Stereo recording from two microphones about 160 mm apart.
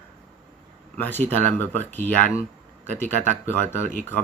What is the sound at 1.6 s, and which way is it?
Speech, 10° left (ahead or behind).